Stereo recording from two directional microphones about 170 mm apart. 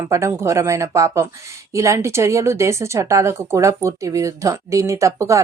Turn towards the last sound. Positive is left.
turn(degrees=-20)  # may be behind; listen again after turning